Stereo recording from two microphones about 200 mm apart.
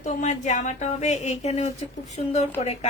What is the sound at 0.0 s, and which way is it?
A woman's voice, 35° left (ahead or behind).